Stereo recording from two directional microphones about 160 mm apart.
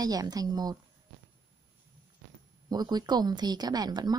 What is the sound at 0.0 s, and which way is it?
Speech, 25° right (ahead or behind).